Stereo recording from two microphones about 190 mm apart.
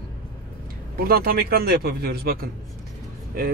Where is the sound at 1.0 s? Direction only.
50° right (ahead or behind).